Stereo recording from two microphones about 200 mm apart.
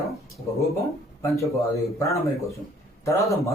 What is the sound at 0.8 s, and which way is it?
A man's voice, 15° left (ahead or behind).